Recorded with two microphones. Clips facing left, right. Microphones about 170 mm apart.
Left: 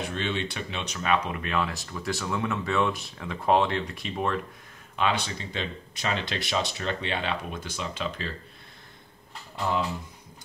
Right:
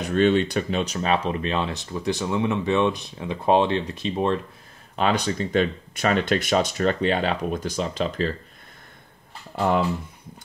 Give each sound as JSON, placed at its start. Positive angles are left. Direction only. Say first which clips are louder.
{"t": 0.0, "sound": "speech", "louder": "right 11 dB", "side_deg": -45}
{"t": 4.9, "sound": "speech", "louder": "right 5 dB", "side_deg": -40}
{"t": 9.6, "sound": "speech", "louder": "right 6 dB", "side_deg": -60}